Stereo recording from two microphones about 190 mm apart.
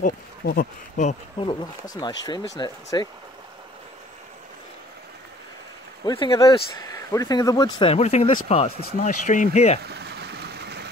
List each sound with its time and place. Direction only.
0.0 s speech: 50° left (ahead or behind)
1.4 s speech: 25° left (ahead or behind)
6.0 s speech: 25° left (ahead or behind)
7.9 s speech: 35° left (ahead or behind)
9.8 s vehicle: 60° right (ahead or behind)